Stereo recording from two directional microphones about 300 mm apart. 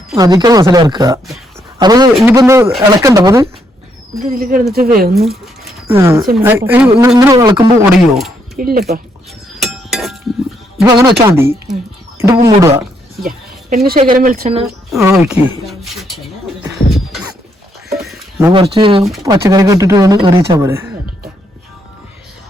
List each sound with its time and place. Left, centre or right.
0.1 s speech: centre
4.2 s speech: right
5.2 s speech: centre
8.5 s speech: right
9.6 s chink: centre
10.8 s speech: centre
12.2 s speech: centre
13.2 s a sound: right
14.1 s speech: right
14.8 s speech: centre
16.6 s music: centre
17.8 s a sound: centre
19.2 s speech: centre